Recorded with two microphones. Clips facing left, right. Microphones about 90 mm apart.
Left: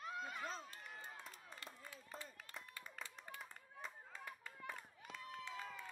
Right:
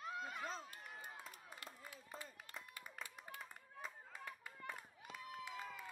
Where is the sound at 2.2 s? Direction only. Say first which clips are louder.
Even; 5° right (ahead or behind).